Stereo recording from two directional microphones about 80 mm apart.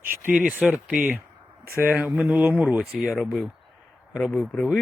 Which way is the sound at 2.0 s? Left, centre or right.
Centre.